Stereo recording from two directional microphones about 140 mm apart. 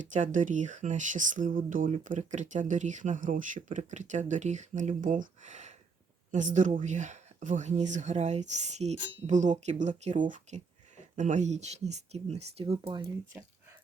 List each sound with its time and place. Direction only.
0.1 s speech: 65° right (ahead or behind); by 12.9 s 45° right (ahead or behind)
12.9 s speech: 25° right (ahead or behind)